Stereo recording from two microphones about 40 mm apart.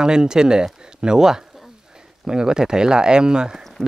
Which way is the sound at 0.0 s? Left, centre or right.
Centre.